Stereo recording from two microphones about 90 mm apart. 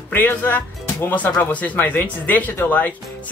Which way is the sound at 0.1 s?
25° left (ahead or behind).